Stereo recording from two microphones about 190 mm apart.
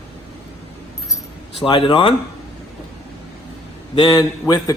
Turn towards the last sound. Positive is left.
turn(degrees=20)  # may be behind; listen again after turning